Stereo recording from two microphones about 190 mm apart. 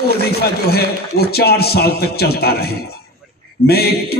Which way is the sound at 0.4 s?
55° left (ahead or behind).